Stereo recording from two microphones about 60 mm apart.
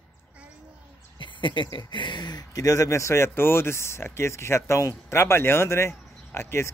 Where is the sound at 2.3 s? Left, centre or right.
Left.